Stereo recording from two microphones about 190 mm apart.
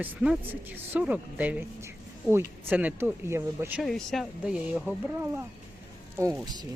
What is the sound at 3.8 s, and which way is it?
Speech, centre (ahead or behind).